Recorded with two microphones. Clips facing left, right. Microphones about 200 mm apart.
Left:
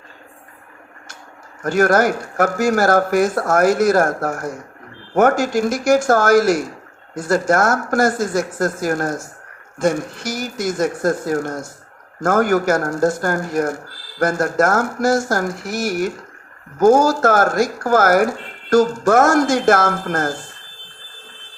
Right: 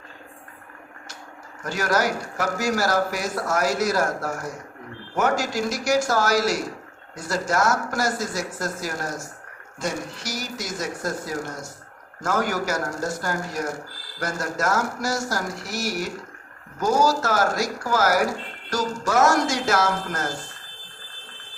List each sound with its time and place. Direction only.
1.6 s speech: 55° left (ahead or behind)